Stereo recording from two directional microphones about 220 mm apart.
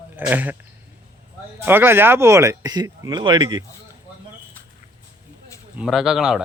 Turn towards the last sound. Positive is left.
turn(degrees=-5)  # may be behind; listen again after turning